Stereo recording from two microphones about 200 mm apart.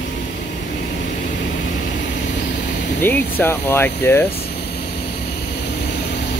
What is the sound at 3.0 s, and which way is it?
Speech, 10° left (ahead or behind).